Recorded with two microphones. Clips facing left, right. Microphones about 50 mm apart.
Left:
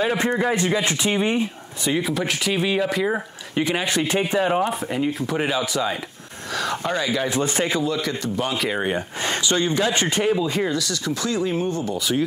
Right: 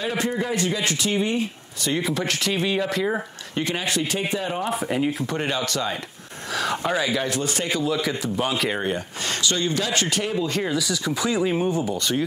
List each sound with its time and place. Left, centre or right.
0.0 s speech: left
1.9 s speech: centre
3.8 s speech: left
4.6 s speech: centre
7.2 s speech: left
7.8 s speech: centre
8.8 s speech: centre
10.7 s speech: centre